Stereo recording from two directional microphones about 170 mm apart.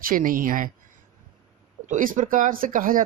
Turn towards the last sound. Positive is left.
turn(degrees=-55)  # may be behind; listen again after turning